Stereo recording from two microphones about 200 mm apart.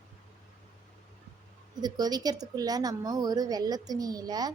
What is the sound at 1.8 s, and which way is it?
Speech, 20° right (ahead or behind).